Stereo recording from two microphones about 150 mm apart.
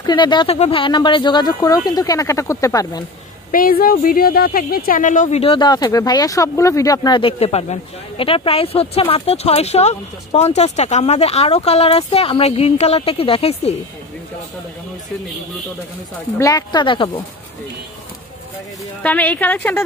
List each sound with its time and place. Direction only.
0.0 s speech: 30° left (ahead or behind)
3.5 s speech: 70° left (ahead or behind)
5.4 s speech: 35° left (ahead or behind)
16.3 s speech: 20° left (ahead or behind)
19.0 s speech: 10° left (ahead or behind)